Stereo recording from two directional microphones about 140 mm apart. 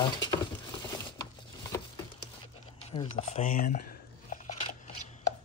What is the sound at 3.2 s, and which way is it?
Speech, 55° left (ahead or behind).